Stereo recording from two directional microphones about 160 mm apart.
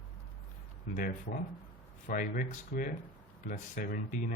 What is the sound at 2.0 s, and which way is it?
Speech, 55° left (ahead or behind).